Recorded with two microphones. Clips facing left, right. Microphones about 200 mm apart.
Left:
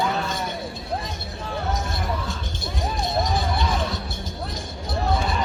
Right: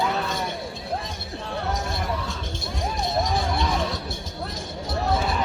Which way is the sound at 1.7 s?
Centre (ahead or behind).